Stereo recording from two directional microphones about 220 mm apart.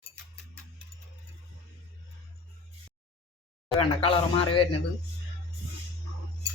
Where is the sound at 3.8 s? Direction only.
25° left (ahead or behind).